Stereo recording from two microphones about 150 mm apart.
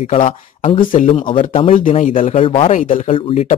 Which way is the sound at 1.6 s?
40° left (ahead or behind).